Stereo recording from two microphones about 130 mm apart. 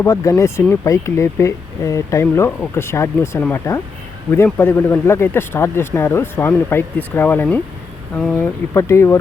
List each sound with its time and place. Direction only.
0.0 s speech: 25° left (ahead or behind)